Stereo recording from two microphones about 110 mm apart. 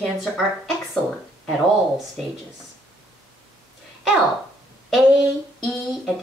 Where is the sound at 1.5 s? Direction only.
Centre (ahead or behind).